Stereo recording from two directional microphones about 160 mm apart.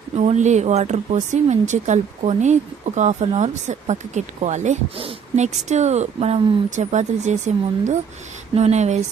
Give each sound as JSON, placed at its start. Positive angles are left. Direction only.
{"t": 0.2, "sound": "speech", "side_deg": -50}